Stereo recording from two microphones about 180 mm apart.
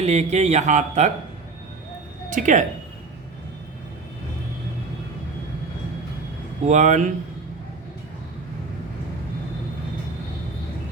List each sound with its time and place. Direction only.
0.0 s speech: 40° right (ahead or behind)
2.3 s speech: 45° right (ahead or behind)
6.7 s speech: 40° right (ahead or behind)